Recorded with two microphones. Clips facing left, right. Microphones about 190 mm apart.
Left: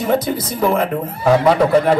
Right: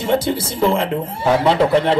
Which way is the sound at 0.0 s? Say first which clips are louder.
Left 1 dB; 25° right (ahead or behind).